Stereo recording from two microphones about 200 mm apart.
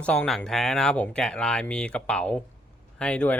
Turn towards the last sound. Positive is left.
turn(degrees=5)  # may be behind; listen again after turning